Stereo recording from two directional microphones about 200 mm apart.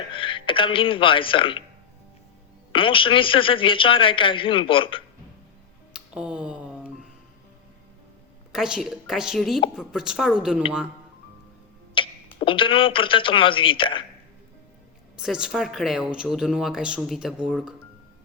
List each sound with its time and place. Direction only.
0.1 s speech: 25° left (ahead or behind)
2.7 s speech: 25° left (ahead or behind)
5.9 s a sound: 5° right (ahead or behind)
8.5 s speech: 5° right (ahead or behind)
11.9 s speech: 25° left (ahead or behind)
15.2 s speech: 5° right (ahead or behind)